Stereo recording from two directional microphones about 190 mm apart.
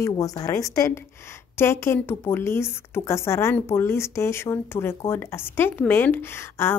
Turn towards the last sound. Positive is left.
turn(degrees=10)  # may be behind; listen again after turning